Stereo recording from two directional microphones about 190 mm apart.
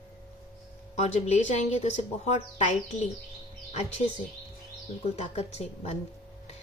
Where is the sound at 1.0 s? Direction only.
35° left (ahead or behind).